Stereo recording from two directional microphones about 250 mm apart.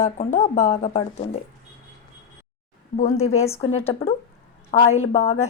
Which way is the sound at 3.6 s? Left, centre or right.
Left.